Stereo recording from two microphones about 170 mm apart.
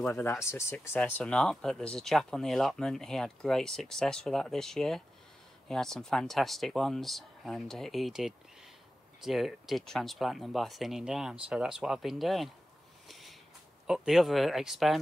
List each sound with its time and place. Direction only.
0.5 s speech: 15° left (ahead or behind); by 12.4 s centre (ahead or behind)
13.1 s a sound: centre (ahead or behind)
13.8 s speech: 5° right (ahead or behind)